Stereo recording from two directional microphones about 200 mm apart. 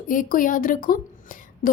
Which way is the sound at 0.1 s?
45° left (ahead or behind).